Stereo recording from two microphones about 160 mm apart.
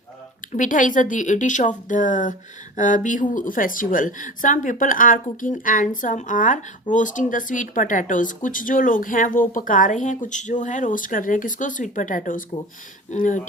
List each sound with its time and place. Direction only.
0.5 s speech: 55° left (ahead or behind)